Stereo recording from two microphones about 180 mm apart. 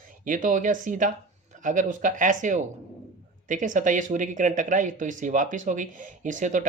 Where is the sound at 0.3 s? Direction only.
45° right (ahead or behind).